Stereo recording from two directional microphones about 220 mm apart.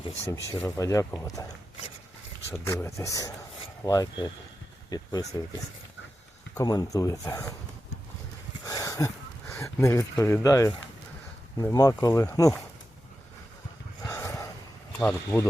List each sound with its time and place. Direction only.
0.6 s speech: 15° left (ahead or behind)
2.5 s speech: 10° left (ahead or behind)
6.6 s speech: 15° left (ahead or behind)
8.6 s a sound: 15° left (ahead or behind)
11.5 s speech: 15° left (ahead or behind)
14.1 s a sound: 10° left (ahead or behind)
14.9 s speech: 10° left (ahead or behind)